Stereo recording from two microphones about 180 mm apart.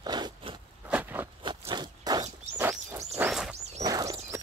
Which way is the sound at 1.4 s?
25° right (ahead or behind).